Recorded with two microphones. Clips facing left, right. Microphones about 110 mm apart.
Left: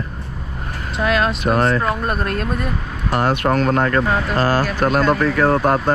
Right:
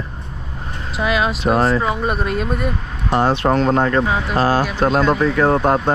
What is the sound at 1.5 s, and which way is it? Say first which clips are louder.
Speech: right 1 dB; 30° right (ahead or behind).